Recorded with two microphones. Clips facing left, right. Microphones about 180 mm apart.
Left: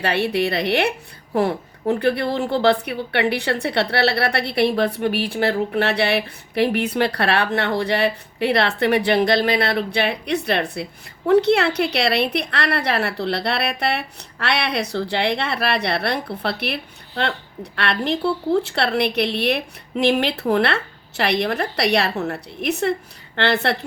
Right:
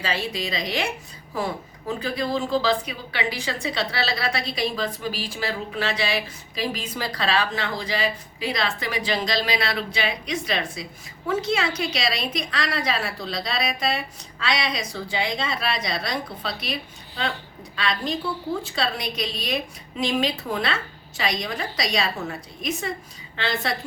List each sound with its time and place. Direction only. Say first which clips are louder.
0.0 s a woman's voice: left 8 dB; 65° left (ahead or behind)